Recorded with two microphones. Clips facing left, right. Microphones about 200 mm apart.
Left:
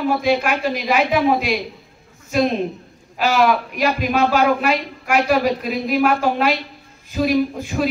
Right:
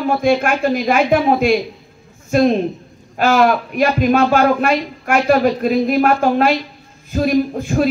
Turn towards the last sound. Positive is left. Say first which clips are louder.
# right 4 dB
turn(degrees=-50)  # may be behind; listen again after turning